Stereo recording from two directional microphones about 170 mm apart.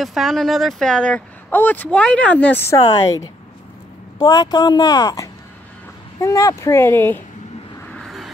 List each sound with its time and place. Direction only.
0.0 s speech: centre (ahead or behind)
2.7 s speech: 20° left (ahead or behind)
7.9 s vehicle: centre (ahead or behind)